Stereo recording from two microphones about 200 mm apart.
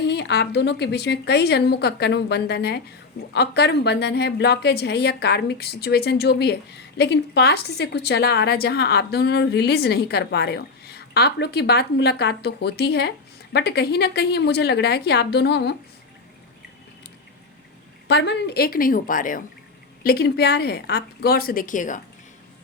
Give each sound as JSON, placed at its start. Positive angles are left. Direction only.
{"t": 0.1, "sound": "a woman's voice", "side_deg": 55}
{"t": 18.1, "sound": "a woman's voice", "side_deg": 60}